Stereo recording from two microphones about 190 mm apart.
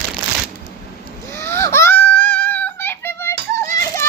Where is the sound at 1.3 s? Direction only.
15° left (ahead or behind).